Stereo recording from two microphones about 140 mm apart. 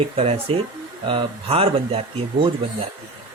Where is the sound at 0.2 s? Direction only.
45° right (ahead or behind).